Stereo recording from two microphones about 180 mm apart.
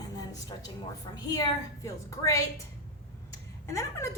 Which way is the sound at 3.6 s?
15° left (ahead or behind).